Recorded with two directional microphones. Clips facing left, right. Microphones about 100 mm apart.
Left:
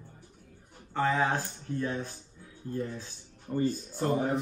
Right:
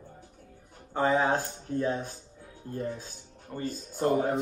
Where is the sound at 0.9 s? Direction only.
20° right (ahead or behind).